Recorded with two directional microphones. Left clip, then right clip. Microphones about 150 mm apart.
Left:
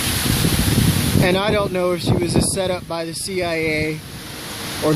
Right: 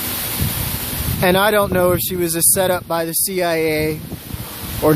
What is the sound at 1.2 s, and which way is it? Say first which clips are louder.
Speech: right 5 dB; 35° right (ahead or behind).